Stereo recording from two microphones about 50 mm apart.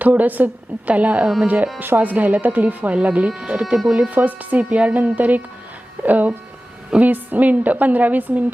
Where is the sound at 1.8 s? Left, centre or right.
Right.